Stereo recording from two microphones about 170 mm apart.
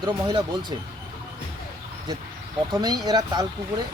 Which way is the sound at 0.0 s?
25° right (ahead or behind).